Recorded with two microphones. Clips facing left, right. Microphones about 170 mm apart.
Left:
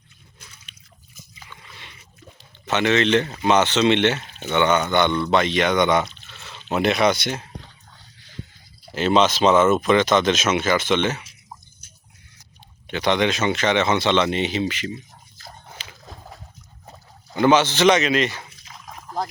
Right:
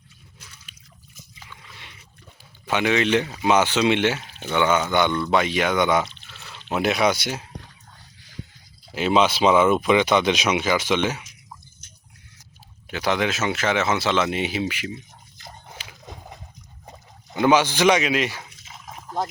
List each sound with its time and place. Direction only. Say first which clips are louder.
0.3 s a sound: left 1 dB; 5° right (ahead or behind)
2.6 s speech: left 2 dB; 10° right (ahead or behind)
8.9 s speech: left 1 dB; 5° right (ahead or behind)
12.9 s speech: left 3 dB; 5° right (ahead or behind)
15.4 s dog: even; 20° right (ahead or behind)
16.0 s a sound: right 1 dB; 20° right (ahead or behind)
17.3 s speech: left 1 dB; 5° right (ahead or behind)